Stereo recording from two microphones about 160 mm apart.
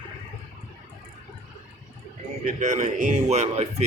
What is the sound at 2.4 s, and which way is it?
A man's voice, 50° right (ahead or behind).